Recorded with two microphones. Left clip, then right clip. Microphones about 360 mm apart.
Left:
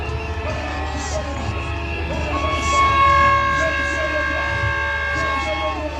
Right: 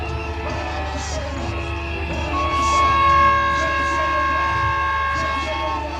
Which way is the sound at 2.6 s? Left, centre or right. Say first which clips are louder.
Left 1 dB; centre.